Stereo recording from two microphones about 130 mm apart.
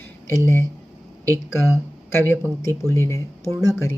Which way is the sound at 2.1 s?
20° left (ahead or behind).